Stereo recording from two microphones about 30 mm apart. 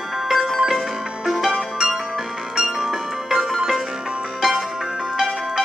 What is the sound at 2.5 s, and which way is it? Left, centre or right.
Music, centre.